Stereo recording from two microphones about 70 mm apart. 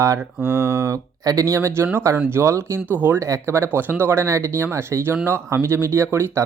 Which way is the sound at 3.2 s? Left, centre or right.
Right.